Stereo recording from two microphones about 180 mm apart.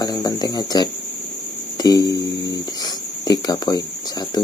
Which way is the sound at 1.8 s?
20° left (ahead or behind).